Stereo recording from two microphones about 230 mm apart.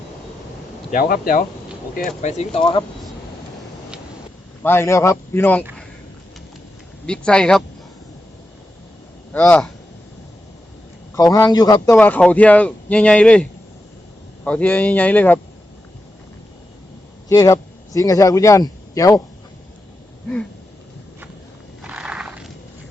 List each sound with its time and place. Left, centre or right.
0.9 s speech: left
4.6 s a man's voice: centre
7.0 s speech: centre
9.3 s speech: centre
11.1 s a man's voice: centre
17.2 s speech: centre
21.8 s a sound: centre